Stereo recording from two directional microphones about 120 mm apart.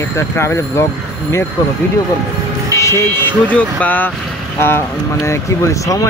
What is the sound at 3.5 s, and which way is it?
Speech, 10° left (ahead or behind).